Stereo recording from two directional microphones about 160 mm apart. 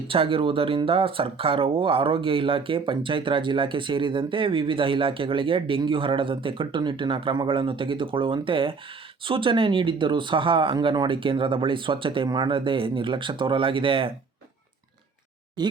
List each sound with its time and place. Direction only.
0.1 s speech: 35° right (ahead or behind)
15.6 s speech: 25° right (ahead or behind)